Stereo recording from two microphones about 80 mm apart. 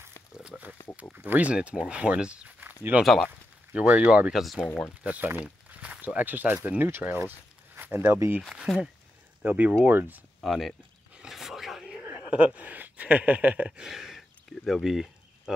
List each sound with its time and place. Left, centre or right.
0.5 s pig: centre
1.1 s speech: right
3.0 s speech: centre
3.7 s speech: centre
5.0 s speech: right
8.4 s speech: centre
9.4 s speech: centre
10.4 s speech: centre
11.1 s a sound: centre
12.4 s speech: centre
14.6 s a sound: centre